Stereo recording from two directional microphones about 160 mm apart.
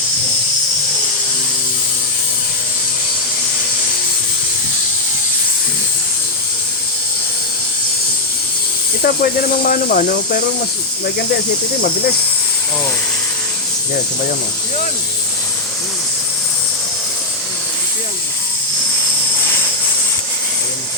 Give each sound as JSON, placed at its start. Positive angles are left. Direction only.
{"t": 9.0, "sound": "speech", "side_deg": 70}